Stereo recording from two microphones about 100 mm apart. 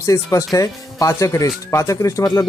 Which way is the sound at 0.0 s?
35° left (ahead or behind).